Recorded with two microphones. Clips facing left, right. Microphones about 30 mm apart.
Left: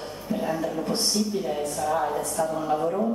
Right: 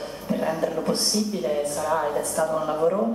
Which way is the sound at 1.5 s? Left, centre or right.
Centre.